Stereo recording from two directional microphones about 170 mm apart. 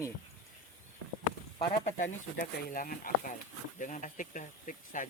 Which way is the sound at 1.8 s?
50° left (ahead or behind).